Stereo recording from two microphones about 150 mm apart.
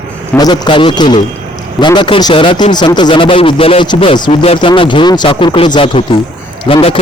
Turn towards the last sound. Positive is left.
turn(degrees=40)  # may be behind; listen again after turning